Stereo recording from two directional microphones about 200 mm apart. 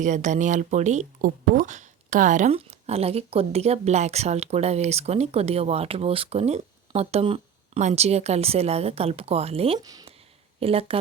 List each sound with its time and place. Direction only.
0.0 s speech: 40° right (ahead or behind); by 10.1 s 20° right (ahead or behind)
10.6 s speech: 30° right (ahead or behind)